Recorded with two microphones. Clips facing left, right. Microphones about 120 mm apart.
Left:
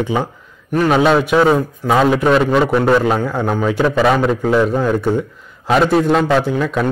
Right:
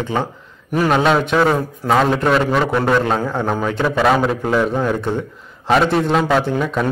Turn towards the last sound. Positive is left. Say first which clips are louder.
# left 2 dB
turn(degrees=0)  # may be behind; listen again after turning